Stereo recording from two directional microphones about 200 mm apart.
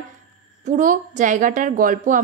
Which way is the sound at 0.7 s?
40° right (ahead or behind).